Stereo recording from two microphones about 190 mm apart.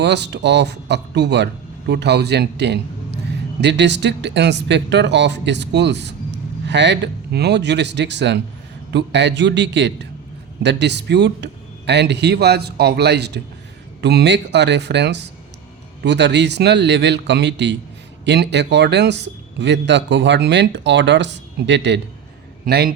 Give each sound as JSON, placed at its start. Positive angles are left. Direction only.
{"t": 0.0, "sound": "speech", "side_deg": -65}
{"t": 22.6, "sound": "a man's voice", "side_deg": -55}